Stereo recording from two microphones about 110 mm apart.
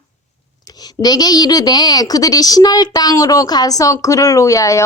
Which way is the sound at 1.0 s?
35° left (ahead or behind).